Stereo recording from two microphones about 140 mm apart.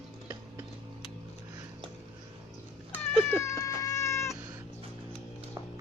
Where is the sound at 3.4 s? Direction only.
25° left (ahead or behind).